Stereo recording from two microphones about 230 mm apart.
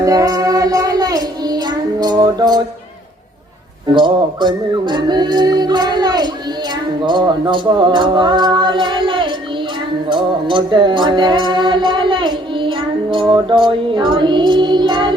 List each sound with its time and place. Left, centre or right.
0.0 s child singing: centre
3.9 s music: right